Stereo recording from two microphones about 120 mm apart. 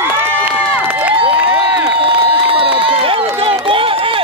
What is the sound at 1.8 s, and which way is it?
Run, 45° right (ahead or behind).